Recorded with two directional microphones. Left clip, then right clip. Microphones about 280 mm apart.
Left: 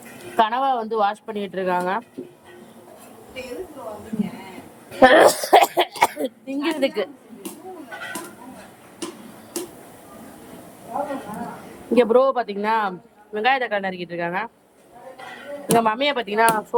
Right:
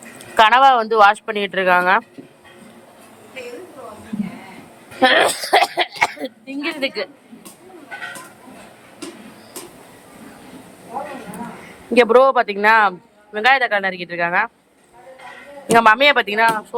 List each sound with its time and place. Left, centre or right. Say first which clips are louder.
0.3 s speech: right 8 dB; centre
4.9 s speech: left 2 dB; centre
11.9 s speech: right 5 dB; centre
15.6 s speech: right 7 dB; centre